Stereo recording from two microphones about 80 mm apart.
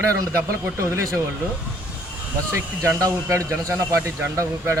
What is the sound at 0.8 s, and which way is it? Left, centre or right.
Speech, right.